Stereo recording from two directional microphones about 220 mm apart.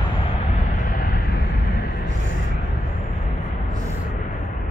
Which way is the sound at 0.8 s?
40° left (ahead or behind).